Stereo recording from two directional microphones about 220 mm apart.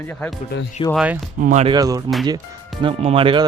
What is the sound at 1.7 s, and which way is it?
Speech, 15° right (ahead or behind).